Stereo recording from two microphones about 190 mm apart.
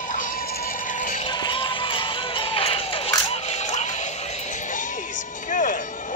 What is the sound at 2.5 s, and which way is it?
Music, 30° left (ahead or behind).